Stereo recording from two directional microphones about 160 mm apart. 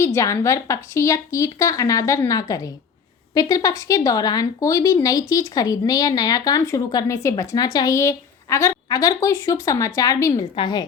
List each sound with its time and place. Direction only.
0.0 s speech: 15° left (ahead or behind)